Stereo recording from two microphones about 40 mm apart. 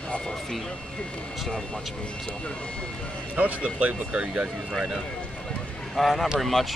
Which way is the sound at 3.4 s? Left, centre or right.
Right.